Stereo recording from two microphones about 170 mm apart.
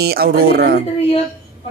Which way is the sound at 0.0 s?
65° right (ahead or behind).